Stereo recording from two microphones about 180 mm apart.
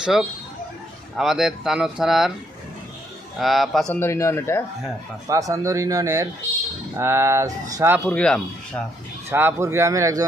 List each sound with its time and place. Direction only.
0.0 s speech: centre (ahead or behind)
3.3 s speech: centre (ahead or behind)
3.9 s speech: 15° left (ahead or behind)
5.3 s speech: 20° right (ahead or behind)
8.1 s speech: 5° left (ahead or behind)
9.3 s speech: 15° right (ahead or behind)